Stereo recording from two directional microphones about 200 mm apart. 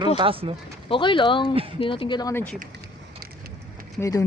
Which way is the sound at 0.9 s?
25° left (ahead or behind).